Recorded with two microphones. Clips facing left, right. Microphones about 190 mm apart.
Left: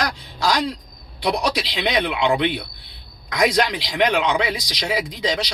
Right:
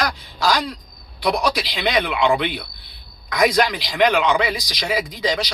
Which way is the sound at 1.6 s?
25° left (ahead or behind).